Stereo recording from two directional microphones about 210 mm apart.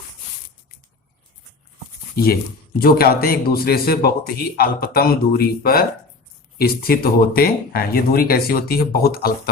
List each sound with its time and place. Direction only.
2.1 s a man's voice: 45° left (ahead or behind)